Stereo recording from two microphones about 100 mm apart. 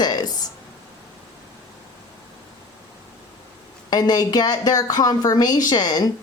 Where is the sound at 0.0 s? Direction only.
45° left (ahead or behind).